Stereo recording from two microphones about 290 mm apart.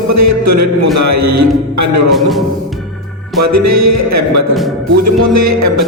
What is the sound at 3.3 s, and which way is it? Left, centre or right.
A man's voice, right.